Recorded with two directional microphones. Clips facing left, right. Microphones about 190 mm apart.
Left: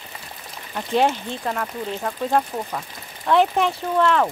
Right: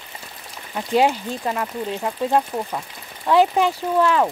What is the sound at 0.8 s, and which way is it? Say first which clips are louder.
Speech: right 2 dB; 10° right (ahead or behind).